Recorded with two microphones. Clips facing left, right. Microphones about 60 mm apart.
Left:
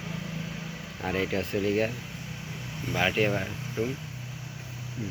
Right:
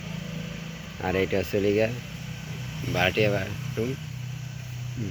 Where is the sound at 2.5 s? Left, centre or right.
Centre.